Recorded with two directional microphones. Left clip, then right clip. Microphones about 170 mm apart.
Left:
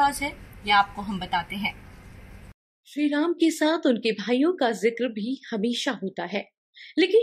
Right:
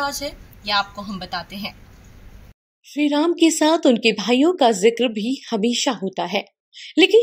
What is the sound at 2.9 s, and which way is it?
Speech, 35° right (ahead or behind).